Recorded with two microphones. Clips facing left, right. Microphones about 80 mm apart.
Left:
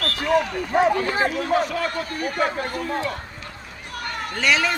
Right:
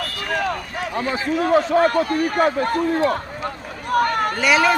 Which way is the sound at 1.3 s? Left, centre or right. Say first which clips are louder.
Right 5 dB; right.